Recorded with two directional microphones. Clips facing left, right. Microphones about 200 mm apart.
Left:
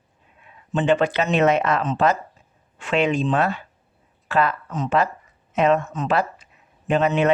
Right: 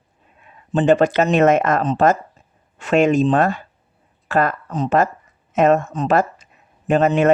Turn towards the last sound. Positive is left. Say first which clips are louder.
# right 4 dB
turn(degrees=-45)  # may be behind; listen again after turning